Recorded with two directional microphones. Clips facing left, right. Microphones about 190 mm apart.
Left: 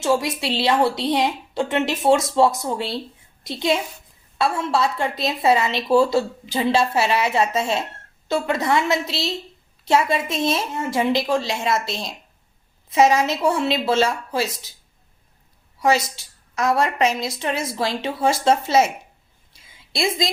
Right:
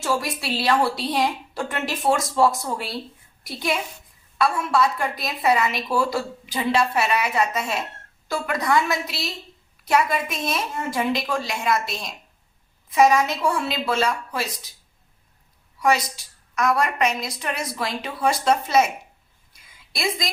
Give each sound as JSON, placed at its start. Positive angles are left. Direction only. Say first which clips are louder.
{"t": 0.0, "sound": "a woman's voice", "louder": "left 5 dB", "side_deg": 20}
{"t": 15.8, "sound": "a woman's voice", "louder": "left 2 dB", "side_deg": 25}
{"t": 19.5, "sound": "a sound", "louder": "left 7 dB", "side_deg": 25}